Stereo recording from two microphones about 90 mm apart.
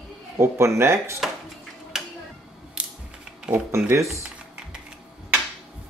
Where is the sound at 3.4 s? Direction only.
15° right (ahead or behind).